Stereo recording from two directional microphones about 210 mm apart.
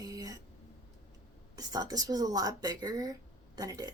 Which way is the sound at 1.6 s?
15° right (ahead or behind).